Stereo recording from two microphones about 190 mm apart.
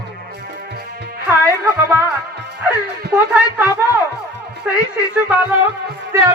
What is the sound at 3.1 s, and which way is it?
Music, 10° right (ahead or behind).